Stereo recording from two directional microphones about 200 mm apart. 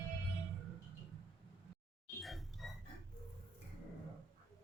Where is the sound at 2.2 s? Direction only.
Centre (ahead or behind).